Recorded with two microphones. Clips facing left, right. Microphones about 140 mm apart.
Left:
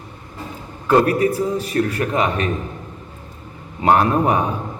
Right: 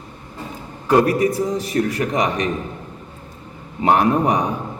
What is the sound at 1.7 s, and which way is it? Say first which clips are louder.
Speech: even; 15° right (ahead or behind).